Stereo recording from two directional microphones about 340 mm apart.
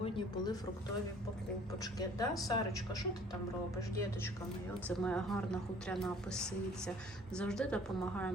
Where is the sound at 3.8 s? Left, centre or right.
Centre.